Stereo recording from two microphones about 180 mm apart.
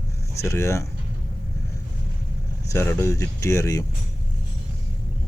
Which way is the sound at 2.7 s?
15° left (ahead or behind).